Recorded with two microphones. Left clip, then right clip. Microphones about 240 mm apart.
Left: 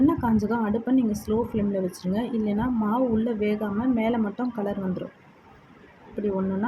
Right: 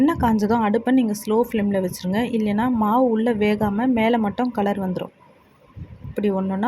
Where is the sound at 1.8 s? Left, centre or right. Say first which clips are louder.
Right 3 dB; right.